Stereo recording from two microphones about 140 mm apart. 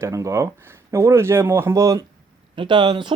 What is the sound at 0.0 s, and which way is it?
Speech, 20° right (ahead or behind).